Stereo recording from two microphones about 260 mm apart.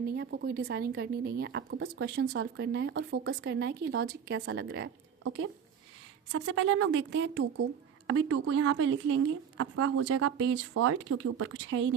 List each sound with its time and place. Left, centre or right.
0.2 s a woman's voice: right
8.0 s speech: right